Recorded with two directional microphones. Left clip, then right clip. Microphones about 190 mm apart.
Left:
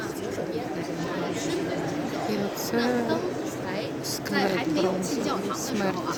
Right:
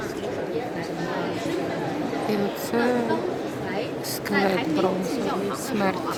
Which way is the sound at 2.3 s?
Centre (ahead or behind).